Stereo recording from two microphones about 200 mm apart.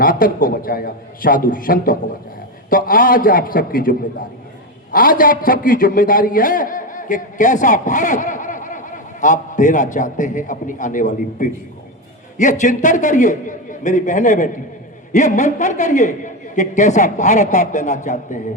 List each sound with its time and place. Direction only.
0.0 s a man's voice: 45° left (ahead or behind)